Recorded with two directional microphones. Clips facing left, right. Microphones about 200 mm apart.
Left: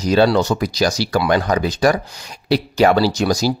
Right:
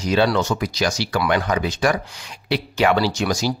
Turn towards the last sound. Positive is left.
turn(degrees=40)  # may be behind; listen again after turning